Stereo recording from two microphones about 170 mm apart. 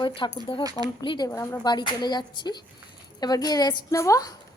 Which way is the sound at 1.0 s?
30° left (ahead or behind).